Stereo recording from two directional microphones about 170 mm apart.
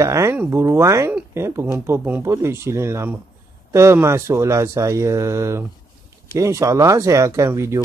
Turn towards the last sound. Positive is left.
turn(degrees=-15)  # may be behind; listen again after turning